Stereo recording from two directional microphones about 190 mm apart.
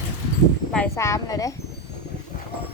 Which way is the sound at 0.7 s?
10° left (ahead or behind).